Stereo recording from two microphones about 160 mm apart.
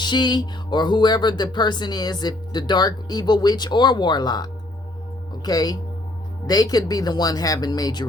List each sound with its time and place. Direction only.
0.0 s speech: 30° left (ahead or behind)